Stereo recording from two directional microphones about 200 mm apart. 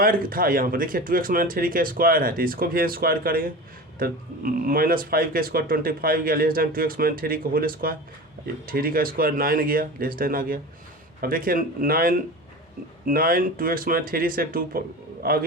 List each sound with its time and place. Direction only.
0.0 s speech: 45° right (ahead or behind)